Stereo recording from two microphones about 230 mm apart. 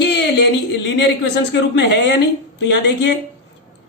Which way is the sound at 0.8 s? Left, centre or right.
Left.